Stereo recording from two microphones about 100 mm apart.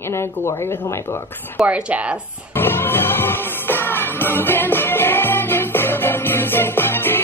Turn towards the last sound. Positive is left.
turn(degrees=20)  # may be behind; listen again after turning